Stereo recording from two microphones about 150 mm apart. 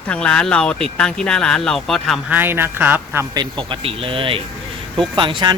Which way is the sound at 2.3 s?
15° right (ahead or behind).